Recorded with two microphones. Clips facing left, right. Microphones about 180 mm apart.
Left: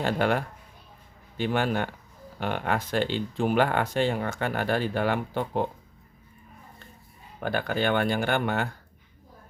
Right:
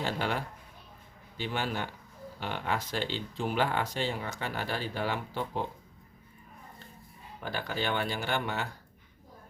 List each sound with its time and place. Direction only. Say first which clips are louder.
0.0 s speech: left 7 dB; 55° left (ahead or behind)
7.4 s speech: left 7 dB; 55° left (ahead or behind)